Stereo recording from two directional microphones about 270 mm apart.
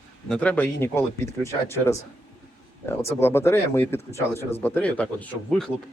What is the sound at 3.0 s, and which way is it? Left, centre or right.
Speech, centre.